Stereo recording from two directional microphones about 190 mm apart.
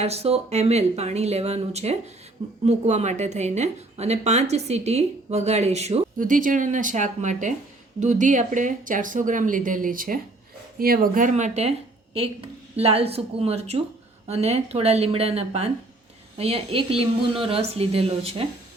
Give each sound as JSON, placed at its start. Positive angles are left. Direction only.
{"t": 0.0, "sound": "a woman's voice", "side_deg": -35}
{"t": 6.1, "sound": "a woman's voice", "side_deg": -45}